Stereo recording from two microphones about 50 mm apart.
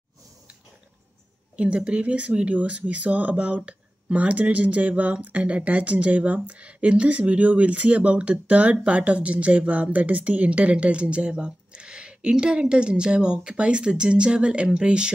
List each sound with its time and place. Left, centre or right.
1.6 s speech: right